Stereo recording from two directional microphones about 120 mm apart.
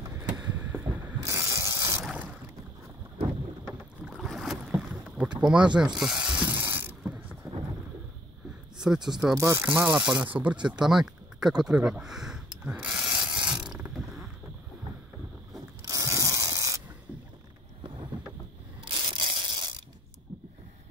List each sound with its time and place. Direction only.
0.4 s a sound: 15° right (ahead or behind)
1.2 s a sound: 25° right (ahead or behind)
4.0 s boat: centre (ahead or behind)
4.6 s boat: 15° right (ahead or behind)
5.4 s speech: 5° right (ahead or behind)
5.9 s ratchet: 5° right (ahead or behind)
8.8 s speech: 5° right (ahead or behind)
9.3 s speech: 25° right (ahead or behind)
9.8 s speech: 10° right (ahead or behind)
10.2 s a sound: 15° right (ahead or behind)
15.8 s ratchet: 30° right (ahead or behind)
18.9 s tearing: 45° right (ahead or behind)